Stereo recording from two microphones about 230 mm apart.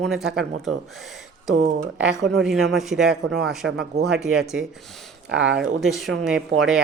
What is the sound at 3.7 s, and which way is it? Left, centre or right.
Speech, right.